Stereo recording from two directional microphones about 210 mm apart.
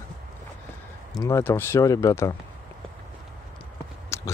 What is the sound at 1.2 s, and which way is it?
Speech, 15° left (ahead or behind).